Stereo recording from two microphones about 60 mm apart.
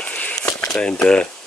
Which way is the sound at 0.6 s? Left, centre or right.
Centre.